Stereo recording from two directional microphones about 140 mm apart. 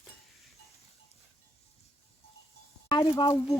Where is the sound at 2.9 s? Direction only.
35° left (ahead or behind).